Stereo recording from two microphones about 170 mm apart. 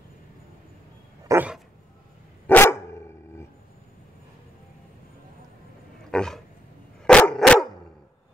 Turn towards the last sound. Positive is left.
turn(degrees=5)  # may be behind; listen again after turning